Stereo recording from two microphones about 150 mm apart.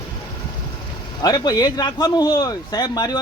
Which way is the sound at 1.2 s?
25° left (ahead or behind).